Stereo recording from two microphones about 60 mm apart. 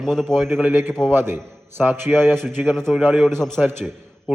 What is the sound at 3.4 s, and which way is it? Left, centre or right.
Speech, centre.